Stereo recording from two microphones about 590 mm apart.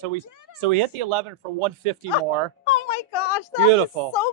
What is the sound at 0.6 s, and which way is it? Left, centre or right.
Speech, right.